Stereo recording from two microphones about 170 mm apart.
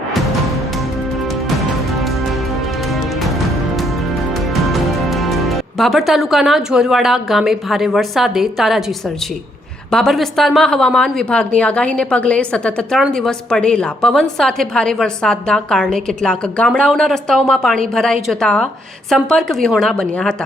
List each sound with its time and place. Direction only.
1.5 s music: centre (ahead or behind)
4.4 s a woman's voice: centre (ahead or behind)